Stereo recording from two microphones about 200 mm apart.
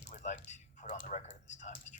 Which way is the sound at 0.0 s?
35° left (ahead or behind).